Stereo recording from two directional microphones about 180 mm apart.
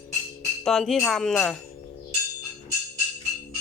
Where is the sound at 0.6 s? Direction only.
5° left (ahead or behind).